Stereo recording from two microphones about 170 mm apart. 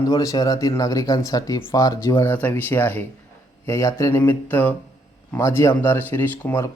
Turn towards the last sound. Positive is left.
turn(degrees=15)  # may be behind; listen again after turning